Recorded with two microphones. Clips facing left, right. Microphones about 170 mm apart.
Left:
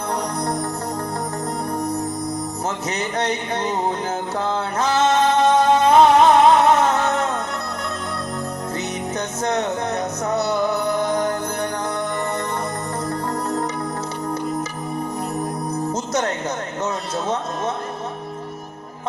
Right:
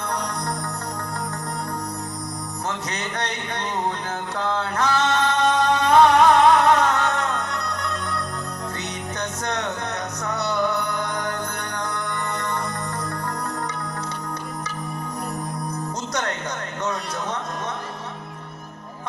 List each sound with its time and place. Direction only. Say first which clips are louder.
2.9 s a sound: left 6 dB; 20° left (ahead or behind)
4.4 s music: even; 20° left (ahead or behind)
9.4 s music: left 7 dB; 25° left (ahead or behind)
13.1 s music: left 5 dB; 25° left (ahead or behind)